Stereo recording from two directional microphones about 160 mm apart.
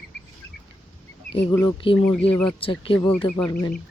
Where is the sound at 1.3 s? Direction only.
35° left (ahead or behind).